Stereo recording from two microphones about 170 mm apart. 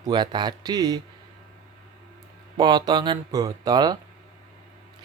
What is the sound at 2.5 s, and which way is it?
Speech, 25° right (ahead or behind).